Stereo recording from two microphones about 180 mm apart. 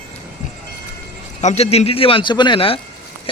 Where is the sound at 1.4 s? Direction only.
40° left (ahead or behind).